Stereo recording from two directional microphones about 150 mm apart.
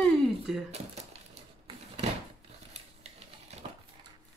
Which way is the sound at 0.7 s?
45° right (ahead or behind).